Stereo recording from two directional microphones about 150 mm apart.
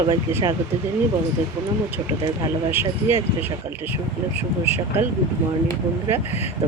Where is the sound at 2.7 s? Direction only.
15° right (ahead or behind).